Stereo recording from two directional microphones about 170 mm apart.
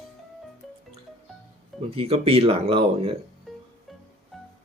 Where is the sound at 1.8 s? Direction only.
35° right (ahead or behind).